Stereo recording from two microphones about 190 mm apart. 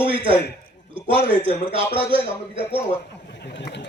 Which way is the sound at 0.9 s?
30° right (ahead or behind).